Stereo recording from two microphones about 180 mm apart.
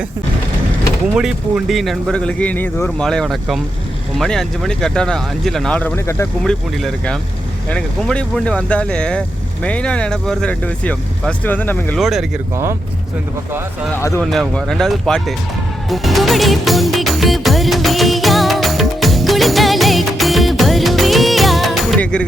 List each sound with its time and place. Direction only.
1.1 s speech: 5° right (ahead or behind)
11.9 s speech: centre (ahead or behind)
13.9 s speech: 15° left (ahead or behind)
14.2 s speech: 5° left (ahead or behind)
15.9 s music: centre (ahead or behind)